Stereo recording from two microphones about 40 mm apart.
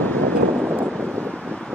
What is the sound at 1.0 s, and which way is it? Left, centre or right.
Wind noise, left.